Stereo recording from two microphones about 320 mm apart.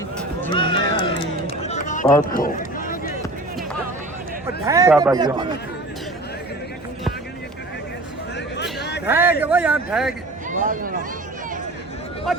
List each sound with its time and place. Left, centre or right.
0.4 s run: centre
4.6 s speech: centre
8.8 s a sound: left
9.0 s a man's voice: centre
10.5 s speech: right